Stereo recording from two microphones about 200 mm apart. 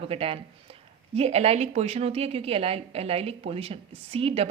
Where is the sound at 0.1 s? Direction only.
30° right (ahead or behind).